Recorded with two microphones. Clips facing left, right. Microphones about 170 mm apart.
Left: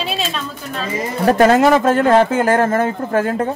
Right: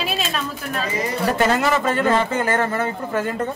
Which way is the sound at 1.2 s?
50° left (ahead or behind).